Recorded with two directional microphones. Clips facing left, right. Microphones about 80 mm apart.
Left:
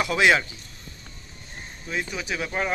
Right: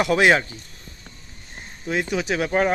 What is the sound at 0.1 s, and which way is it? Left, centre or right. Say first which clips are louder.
Speech: right 2 dB; right.